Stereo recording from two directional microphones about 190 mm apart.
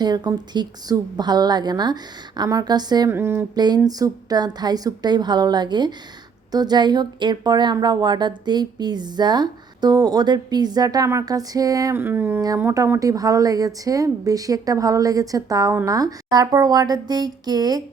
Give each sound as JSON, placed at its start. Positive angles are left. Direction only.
{"t": 0.0, "sound": "speech", "side_deg": -20}